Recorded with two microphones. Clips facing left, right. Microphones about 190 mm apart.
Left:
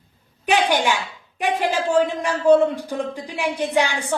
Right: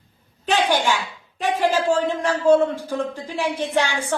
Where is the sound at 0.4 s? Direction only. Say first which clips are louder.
Left 1 dB; 15° left (ahead or behind).